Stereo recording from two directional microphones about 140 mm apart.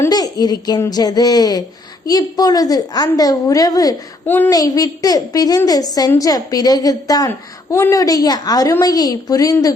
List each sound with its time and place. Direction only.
0.0 s a woman's voice: 25° left (ahead or behind)
4.3 s a child's voice: 15° left (ahead or behind)
4.5 s a woman's voice: 25° left (ahead or behind)